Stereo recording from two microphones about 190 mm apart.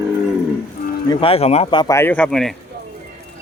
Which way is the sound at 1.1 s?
30° left (ahead or behind).